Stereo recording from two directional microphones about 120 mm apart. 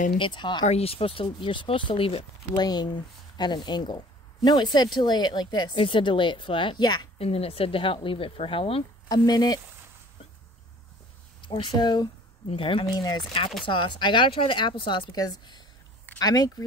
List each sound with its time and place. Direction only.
0.2 s speech: 40° left (ahead or behind)
0.7 s speech: 55° left (ahead or behind)
2.6 s speech: 35° left (ahead or behind)
7.2 s speech: 55° left (ahead or behind)
9.1 s speech: 35° left (ahead or behind)
11.4 s speech: 40° left (ahead or behind)